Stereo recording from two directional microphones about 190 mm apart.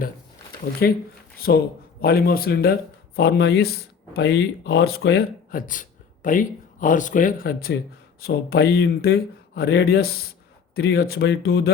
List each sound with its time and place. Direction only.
0.8 s speech: 55° left (ahead or behind)